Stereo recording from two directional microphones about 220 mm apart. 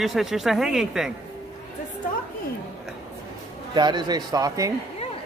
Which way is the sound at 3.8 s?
20° right (ahead or behind).